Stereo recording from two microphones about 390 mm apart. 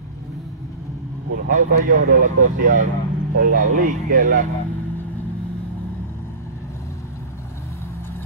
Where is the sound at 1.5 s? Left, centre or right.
Centre.